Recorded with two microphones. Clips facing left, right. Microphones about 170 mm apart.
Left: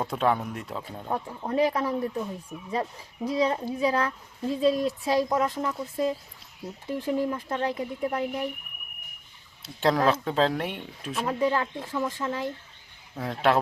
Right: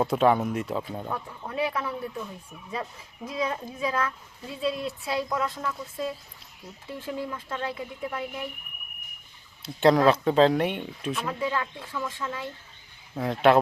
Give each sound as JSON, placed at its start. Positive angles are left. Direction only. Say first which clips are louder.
{"t": 0.1, "sound": "speech", "louder": "right 4 dB", "side_deg": -5}
{"t": 1.1, "sound": "speech", "louder": "left 9 dB", "side_deg": 35}
{"t": 2.5, "sound": "speech", "louder": "left 6 dB", "side_deg": 50}
{"t": 3.2, "sound": "speech", "louder": "left 5 dB", "side_deg": 35}
{"t": 9.6, "sound": "speech", "louder": "right 4 dB", "side_deg": 0}
{"t": 11.3, "sound": "speech", "louder": "left 8 dB", "side_deg": 40}
{"t": 13.1, "sound": "speech", "louder": "right 4 dB", "side_deg": 0}